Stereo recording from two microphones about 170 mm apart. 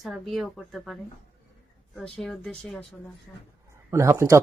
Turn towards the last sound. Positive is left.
turn(degrees=-15)  # may be behind; listen again after turning